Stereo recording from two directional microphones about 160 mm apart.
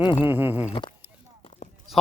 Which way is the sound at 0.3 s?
10° right (ahead or behind).